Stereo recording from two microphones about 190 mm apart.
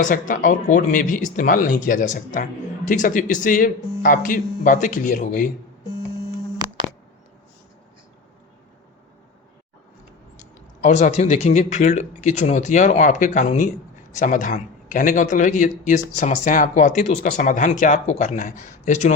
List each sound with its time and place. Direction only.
0.0 s speech: 40° left (ahead or behind)
10.8 s speech: 40° left (ahead or behind)